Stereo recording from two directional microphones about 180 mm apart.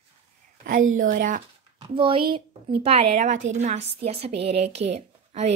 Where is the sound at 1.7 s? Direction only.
30° right (ahead or behind).